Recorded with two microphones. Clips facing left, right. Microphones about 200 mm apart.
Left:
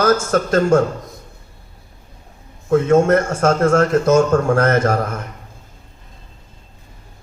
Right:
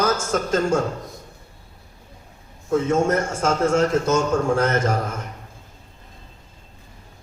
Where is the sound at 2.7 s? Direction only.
65° left (ahead or behind).